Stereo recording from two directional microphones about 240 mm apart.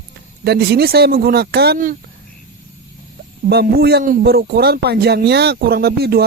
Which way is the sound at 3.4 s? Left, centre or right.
Right.